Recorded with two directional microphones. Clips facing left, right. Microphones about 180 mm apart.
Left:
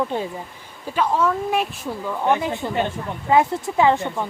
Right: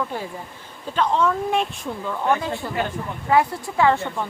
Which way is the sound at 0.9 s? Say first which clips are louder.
Even; 5° left (ahead or behind).